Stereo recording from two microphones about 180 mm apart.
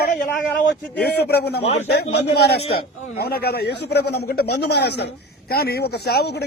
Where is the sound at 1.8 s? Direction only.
65° left (ahead or behind).